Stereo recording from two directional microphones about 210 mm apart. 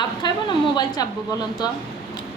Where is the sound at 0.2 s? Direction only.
20° left (ahead or behind).